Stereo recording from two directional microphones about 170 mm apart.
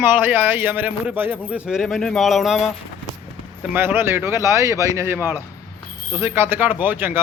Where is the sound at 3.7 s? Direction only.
15° right (ahead or behind).